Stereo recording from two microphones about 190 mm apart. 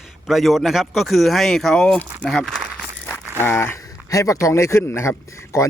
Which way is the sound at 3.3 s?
10° left (ahead or behind).